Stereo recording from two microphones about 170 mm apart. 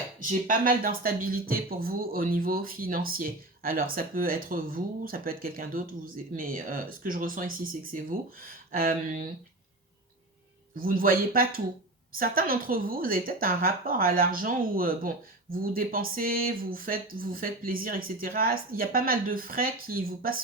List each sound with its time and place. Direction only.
0.2 s a woman's voice: 50° right (ahead or behind)
10.8 s a woman's voice: 55° right (ahead or behind)